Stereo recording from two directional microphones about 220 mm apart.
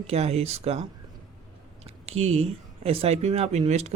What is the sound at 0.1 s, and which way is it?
Speech, 30° right (ahead or behind).